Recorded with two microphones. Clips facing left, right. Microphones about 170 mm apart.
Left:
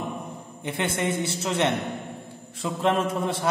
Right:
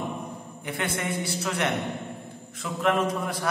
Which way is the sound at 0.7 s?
25° left (ahead or behind).